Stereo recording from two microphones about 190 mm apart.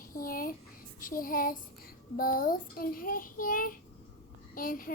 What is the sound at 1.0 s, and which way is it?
A child's voice, 45° left (ahead or behind).